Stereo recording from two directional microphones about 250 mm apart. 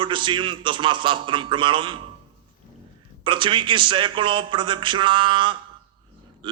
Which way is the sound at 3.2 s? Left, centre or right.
Centre.